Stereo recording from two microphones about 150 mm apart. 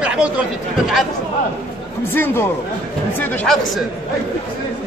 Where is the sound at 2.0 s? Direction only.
15° left (ahead or behind).